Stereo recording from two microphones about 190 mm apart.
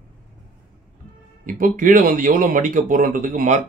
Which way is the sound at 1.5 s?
45° right (ahead or behind).